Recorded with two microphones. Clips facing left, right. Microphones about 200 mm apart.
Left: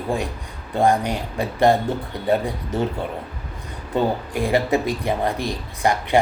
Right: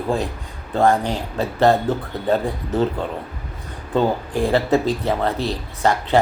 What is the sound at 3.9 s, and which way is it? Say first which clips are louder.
Speech: right 2 dB; 10° left (ahead or behind).